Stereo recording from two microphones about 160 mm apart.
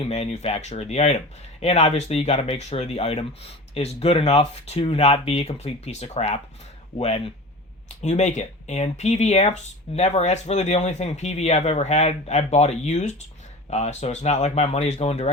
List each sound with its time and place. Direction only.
0.0 s speech: 40° left (ahead or behind)
8.0 s speech: 45° left (ahead or behind)